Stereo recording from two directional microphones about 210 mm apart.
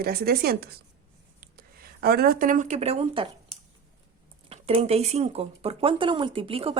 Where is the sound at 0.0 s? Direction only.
45° right (ahead or behind); by 3.2 s 30° right (ahead or behind).